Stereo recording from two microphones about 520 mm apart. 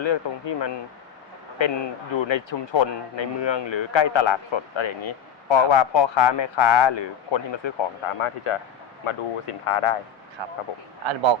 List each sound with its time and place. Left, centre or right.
0.0 s speech: left
9.0 s speech: left
10.4 s speech: right